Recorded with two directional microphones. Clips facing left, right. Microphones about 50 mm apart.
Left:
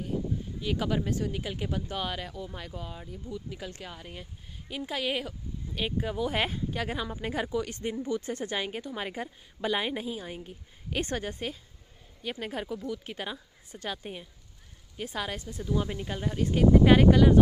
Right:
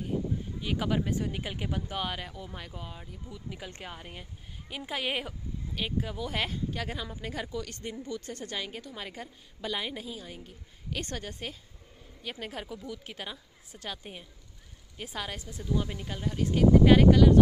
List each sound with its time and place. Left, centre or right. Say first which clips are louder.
0.6 s speech: left 1 dB; centre
3.7 s speech: even; right
5.7 s speech: left 3 dB; centre
7.2 s a woman's voice: left 7 dB; left
12.2 s speech: left 4 dB; centre